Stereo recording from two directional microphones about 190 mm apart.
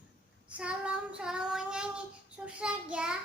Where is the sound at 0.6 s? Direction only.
5° right (ahead or behind).